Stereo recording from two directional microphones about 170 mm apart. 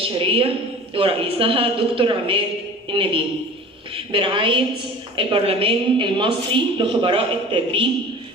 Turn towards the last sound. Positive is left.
turn(degrees=-30)  # may be behind; listen again after turning